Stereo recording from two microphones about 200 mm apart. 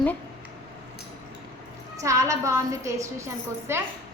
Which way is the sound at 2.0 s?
15° right (ahead or behind).